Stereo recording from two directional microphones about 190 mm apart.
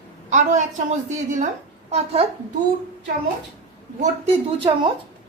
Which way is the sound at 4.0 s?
30° right (ahead or behind).